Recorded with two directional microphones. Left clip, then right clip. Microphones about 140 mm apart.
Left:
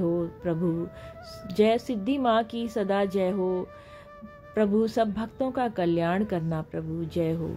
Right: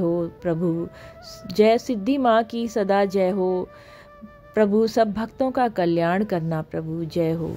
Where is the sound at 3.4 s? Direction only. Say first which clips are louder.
Right 5 dB; 5° right (ahead or behind).